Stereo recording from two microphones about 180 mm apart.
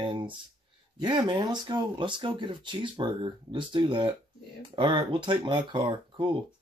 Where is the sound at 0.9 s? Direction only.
25° right (ahead or behind).